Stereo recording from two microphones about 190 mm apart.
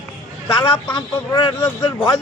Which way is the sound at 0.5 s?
30° left (ahead or behind).